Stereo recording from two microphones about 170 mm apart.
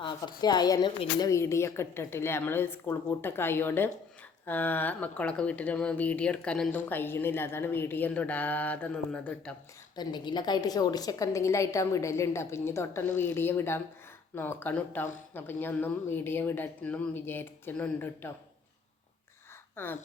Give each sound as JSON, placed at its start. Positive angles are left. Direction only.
{"t": 0.0, "sound": "speech", "side_deg": 25}
{"t": 9.9, "sound": "speech", "side_deg": 25}
{"t": 19.7, "sound": "speech", "side_deg": 10}